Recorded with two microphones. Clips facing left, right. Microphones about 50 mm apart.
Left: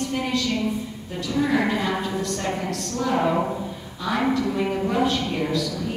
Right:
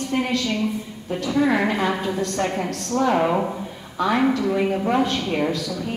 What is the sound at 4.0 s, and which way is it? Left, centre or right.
A woman's voice, right.